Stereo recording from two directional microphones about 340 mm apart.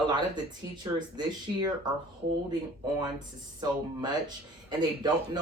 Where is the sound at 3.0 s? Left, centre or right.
Centre.